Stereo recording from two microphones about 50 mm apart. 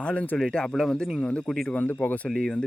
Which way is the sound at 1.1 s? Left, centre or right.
Left.